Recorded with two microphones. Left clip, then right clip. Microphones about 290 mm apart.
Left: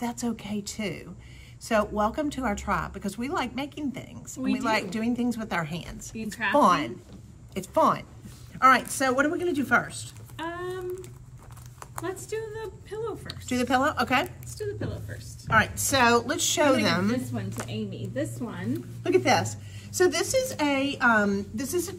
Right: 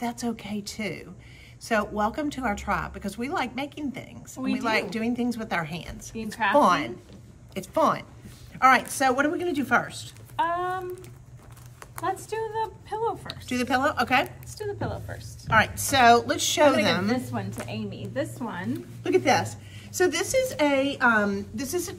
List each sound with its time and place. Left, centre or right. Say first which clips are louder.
0.0 s a woman's voice: right 1 dB; centre
10.3 s a sound: right 8 dB; centre
12.0 s speech: right 4 dB; centre
13.3 s a woman's voice: even; centre
14.5 s speech: right 2 dB; centre
15.5 s a woman's voice: right 1 dB; centre
19.0 s a woman's voice: right 1 dB; centre